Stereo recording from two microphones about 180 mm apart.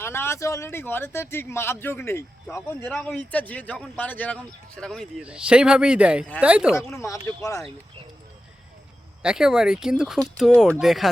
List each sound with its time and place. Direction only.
0.0 s speech: 15° left (ahead or behind); by 6.7 s 5° right (ahead or behind)
6.7 s speech: 15° left (ahead or behind)
9.2 s speech: 5° right (ahead or behind)